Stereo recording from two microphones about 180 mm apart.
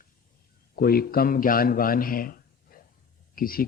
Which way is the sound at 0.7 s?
55° left (ahead or behind).